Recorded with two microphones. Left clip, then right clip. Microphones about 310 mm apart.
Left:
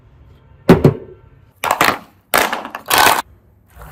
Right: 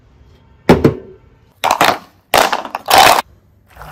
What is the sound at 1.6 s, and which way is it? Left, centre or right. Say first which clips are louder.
Crushing: right 3 dB; centre.